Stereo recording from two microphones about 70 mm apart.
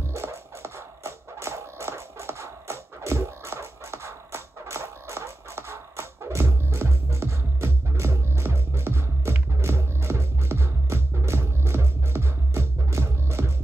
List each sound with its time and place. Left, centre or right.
0.1 s music: right